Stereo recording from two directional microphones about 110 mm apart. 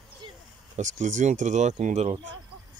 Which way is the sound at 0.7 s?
90° right.